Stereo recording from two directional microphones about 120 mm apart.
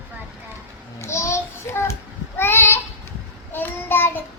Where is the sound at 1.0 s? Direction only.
25° left (ahead or behind).